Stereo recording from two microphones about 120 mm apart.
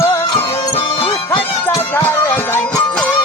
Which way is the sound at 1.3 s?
25° left (ahead or behind).